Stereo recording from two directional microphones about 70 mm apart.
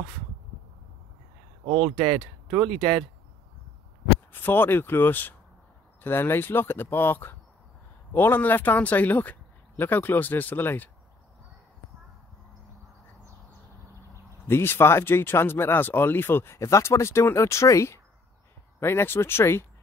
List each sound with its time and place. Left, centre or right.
2.7 s speech: centre
4.3 s speech: left
14.5 s speech: left
18.8 s speech: left